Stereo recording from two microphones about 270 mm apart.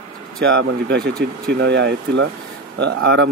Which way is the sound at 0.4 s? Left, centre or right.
Right.